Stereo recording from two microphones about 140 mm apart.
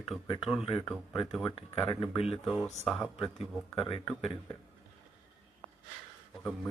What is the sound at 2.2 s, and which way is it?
Speech, centre (ahead or behind).